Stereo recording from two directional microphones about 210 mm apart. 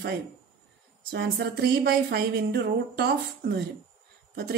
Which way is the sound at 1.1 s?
50° right (ahead or behind).